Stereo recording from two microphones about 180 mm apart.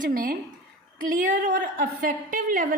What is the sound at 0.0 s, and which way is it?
A woman's voice, 50° right (ahead or behind).